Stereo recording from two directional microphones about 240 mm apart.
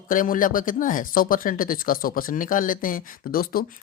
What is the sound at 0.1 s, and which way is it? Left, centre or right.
Speech, left.